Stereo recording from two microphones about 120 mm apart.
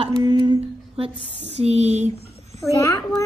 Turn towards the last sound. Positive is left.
turn(degrees=25)  # may be behind; listen again after turning